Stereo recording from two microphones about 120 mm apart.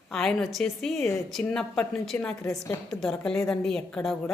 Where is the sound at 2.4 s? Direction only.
25° left (ahead or behind).